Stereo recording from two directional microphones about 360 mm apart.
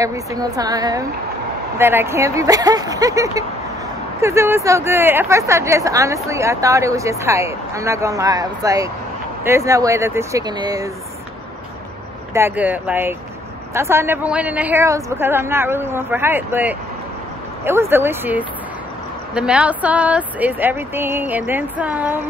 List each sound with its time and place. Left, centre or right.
0.0 s speech: centre
12.4 s speech: centre